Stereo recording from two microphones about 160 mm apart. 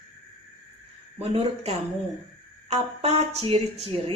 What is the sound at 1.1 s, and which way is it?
Speech, 40° right (ahead or behind).